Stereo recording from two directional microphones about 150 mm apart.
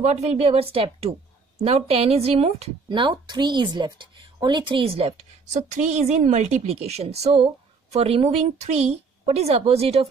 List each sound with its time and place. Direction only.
0.0 s a woman's voice: 45° right (ahead or behind)